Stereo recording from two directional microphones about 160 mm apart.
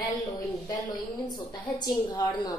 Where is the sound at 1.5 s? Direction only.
25° left (ahead or behind).